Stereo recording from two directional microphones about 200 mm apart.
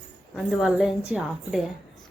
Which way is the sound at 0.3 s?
Centre (ahead or behind).